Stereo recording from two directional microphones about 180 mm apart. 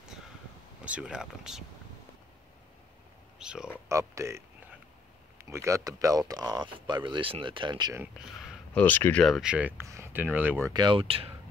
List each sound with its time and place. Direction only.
0.8 s speech: 5° right (ahead or behind)
3.3 s a sound: 5° right (ahead or behind)
3.9 s speech: 15° right (ahead or behind)
5.4 s speech: 15° right (ahead or behind)
8.0 s a sound: 5° right (ahead or behind)
8.8 s speech: 10° left (ahead or behind); by 10.7 s 10° right (ahead or behind)
10.7 s speech: 25° right (ahead or behind)